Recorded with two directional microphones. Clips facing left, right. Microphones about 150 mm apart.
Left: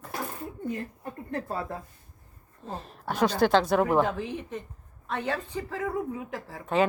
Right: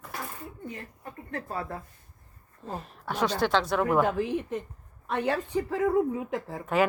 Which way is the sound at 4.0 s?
10° right (ahead or behind).